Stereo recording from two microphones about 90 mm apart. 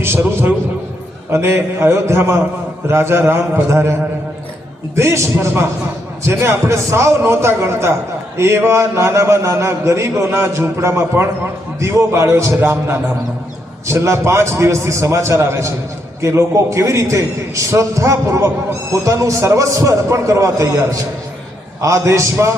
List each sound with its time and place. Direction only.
0.0 s a man's voice: 25° right (ahead or behind)
4.9 s a man's voice: 30° right (ahead or behind)